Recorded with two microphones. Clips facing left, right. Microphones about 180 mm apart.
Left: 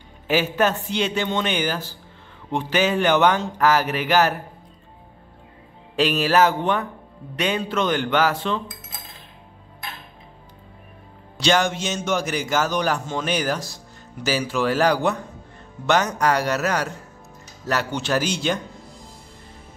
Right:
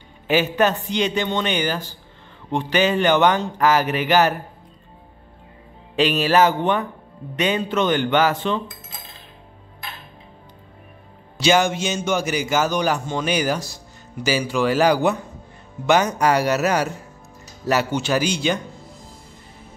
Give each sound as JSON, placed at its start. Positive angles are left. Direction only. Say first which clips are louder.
{"t": 0.3, "sound": "a man's voice", "louder": "right 2 dB", "side_deg": 0}
{"t": 5.9, "sound": "a man's voice", "louder": "right 1 dB", "side_deg": 0}
{"t": 11.3, "sound": "a man's voice", "louder": "right 2 dB", "side_deg": -5}